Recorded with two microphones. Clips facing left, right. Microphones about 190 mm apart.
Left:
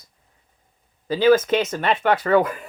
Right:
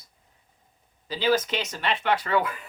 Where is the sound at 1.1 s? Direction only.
50° left (ahead or behind).